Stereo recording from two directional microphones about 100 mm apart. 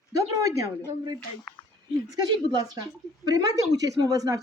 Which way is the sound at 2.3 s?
45° right (ahead or behind).